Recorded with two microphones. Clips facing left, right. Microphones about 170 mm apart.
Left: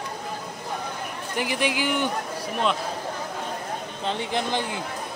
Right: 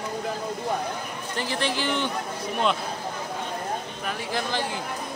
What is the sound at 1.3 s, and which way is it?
Speech, 15° left (ahead or behind).